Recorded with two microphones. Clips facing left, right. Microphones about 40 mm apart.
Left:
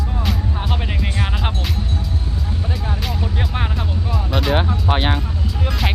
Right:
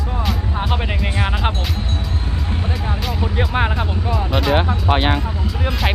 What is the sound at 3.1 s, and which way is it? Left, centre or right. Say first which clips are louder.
Music: right 4 dB; centre.